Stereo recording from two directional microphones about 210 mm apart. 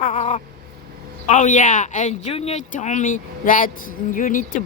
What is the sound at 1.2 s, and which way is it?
Speech, 35° left (ahead or behind).